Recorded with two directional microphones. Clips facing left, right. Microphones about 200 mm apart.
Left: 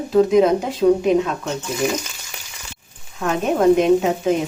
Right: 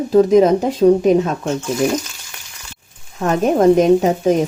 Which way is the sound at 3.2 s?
40° right (ahead or behind).